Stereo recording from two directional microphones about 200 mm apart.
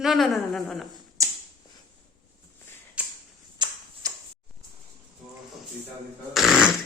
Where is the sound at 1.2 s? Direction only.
15° right (ahead or behind).